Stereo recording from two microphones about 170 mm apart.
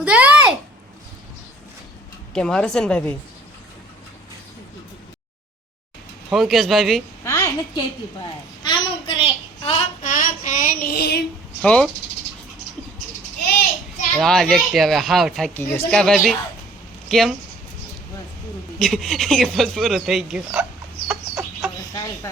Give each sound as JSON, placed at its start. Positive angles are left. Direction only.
{"t": 0.0, "sound": "a sound", "side_deg": -10}
{"t": 2.3, "sound": "speech", "side_deg": 5}
{"t": 6.3, "sound": "speech", "side_deg": 0}
{"t": 7.3, "sound": "a sound", "side_deg": 15}
{"t": 7.8, "sound": "a sound", "side_deg": 30}
{"t": 10.0, "sound": "child singing", "side_deg": 50}
{"t": 11.6, "sound": "speech", "side_deg": 5}
{"t": 14.2, "sound": "speech", "side_deg": 5}
{"t": 15.5, "sound": "speech", "side_deg": 10}
{"t": 18.8, "sound": "speech", "side_deg": 0}
{"t": 21.1, "sound": "chicken", "side_deg": 0}
{"t": 21.8, "sound": "cricket", "side_deg": 20}